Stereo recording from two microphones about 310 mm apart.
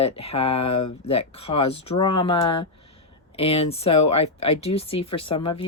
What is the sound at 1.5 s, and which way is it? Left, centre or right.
Speech, centre.